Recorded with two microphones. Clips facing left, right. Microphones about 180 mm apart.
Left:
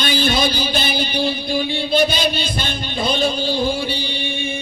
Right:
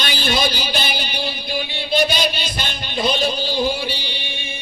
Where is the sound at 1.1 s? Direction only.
50° left (ahead or behind).